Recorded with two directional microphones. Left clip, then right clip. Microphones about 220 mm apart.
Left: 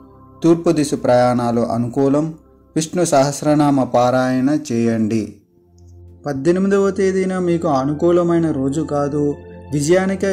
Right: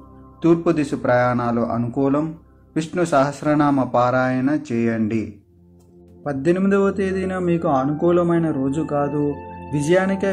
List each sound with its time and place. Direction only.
0.4 s a man's voice: 50° left (ahead or behind)